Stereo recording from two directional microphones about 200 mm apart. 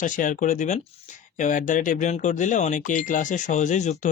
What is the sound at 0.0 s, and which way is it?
Speech, 40° left (ahead or behind).